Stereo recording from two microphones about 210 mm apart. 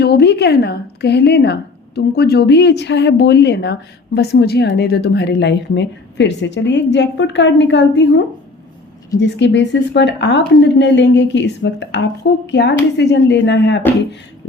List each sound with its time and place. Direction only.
0.0 s a woman's voice: 50° left (ahead or behind)